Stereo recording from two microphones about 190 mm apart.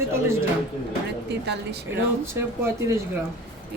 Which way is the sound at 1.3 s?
60° right (ahead or behind).